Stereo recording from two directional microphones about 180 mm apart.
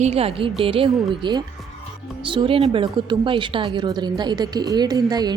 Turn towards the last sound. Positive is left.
turn(degrees=-20)  # may be behind; listen again after turning